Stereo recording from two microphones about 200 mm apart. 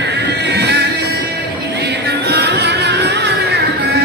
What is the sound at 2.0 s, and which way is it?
Music, 55° right (ahead or behind).